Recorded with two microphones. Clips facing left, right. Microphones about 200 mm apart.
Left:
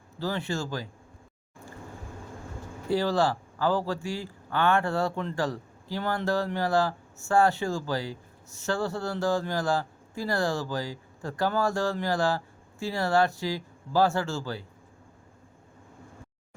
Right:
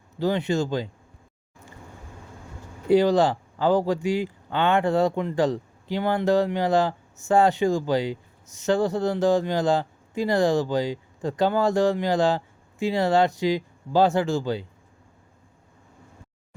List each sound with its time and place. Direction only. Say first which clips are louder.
0.2 s a man's voice: right 7 dB; 20° right (ahead or behind)
2.8 s a man's voice: right 7 dB; 20° right (ahead or behind)